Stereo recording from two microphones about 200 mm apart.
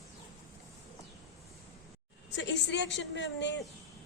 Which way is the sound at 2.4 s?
60° left (ahead or behind).